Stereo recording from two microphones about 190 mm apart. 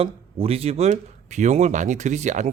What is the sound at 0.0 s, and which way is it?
Speech, 30° right (ahead or behind).